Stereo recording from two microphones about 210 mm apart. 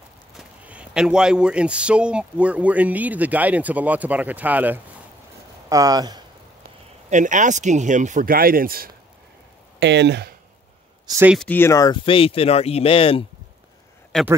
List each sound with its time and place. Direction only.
0.4 s speech: 5° right (ahead or behind)
7.1 s speech: 35° right (ahead or behind)
9.8 s speech: 55° right (ahead or behind)
11.1 s speech: 10° right (ahead or behind)
11.3 s speech: 10° left (ahead or behind); by 13.2 s 25° left (ahead or behind)
14.1 s speech: centre (ahead or behind)